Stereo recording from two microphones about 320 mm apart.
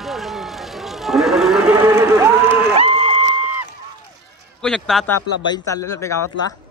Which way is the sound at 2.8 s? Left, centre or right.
Centre.